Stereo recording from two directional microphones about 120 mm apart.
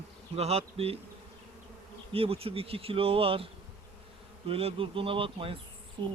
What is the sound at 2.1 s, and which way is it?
Speech, 55° right (ahead or behind).